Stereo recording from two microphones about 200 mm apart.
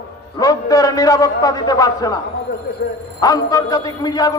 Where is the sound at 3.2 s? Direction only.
15° left (ahead or behind).